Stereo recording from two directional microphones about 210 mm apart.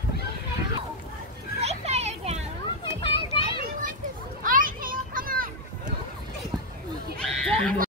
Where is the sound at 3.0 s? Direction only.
25° left (ahead or behind).